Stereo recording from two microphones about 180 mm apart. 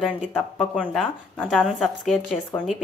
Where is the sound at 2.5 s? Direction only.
25° left (ahead or behind).